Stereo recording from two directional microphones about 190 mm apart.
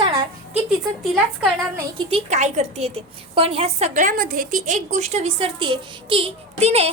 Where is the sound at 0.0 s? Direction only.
25° right (ahead or behind).